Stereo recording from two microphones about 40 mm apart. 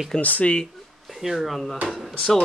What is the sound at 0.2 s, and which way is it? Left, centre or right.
Speech, left.